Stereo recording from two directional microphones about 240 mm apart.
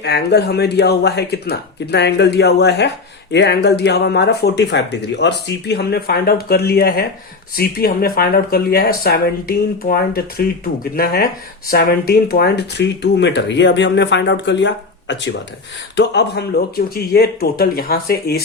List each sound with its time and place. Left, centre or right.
0.0 s speech: left